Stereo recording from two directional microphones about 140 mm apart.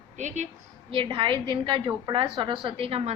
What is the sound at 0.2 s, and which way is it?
Speech, 60° right (ahead or behind).